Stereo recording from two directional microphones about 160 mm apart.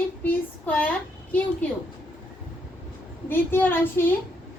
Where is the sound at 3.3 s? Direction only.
10° left (ahead or behind).